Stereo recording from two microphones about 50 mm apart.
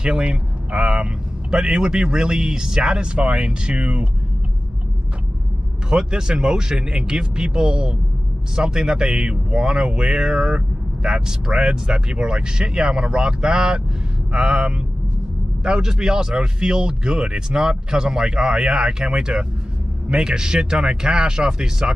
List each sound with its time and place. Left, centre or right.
0.0 s speech: right
5.9 s speech: centre